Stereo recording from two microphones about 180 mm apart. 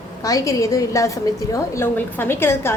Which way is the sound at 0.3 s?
20° left (ahead or behind).